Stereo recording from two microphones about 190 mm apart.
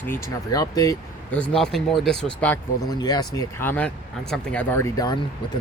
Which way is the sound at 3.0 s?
20° left (ahead or behind).